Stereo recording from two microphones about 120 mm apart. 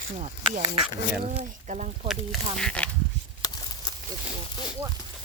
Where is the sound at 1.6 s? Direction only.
80° right.